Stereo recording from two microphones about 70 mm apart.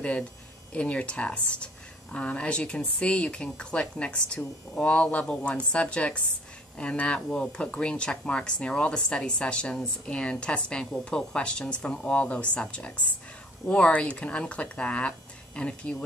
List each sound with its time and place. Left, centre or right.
0.0 s speech: centre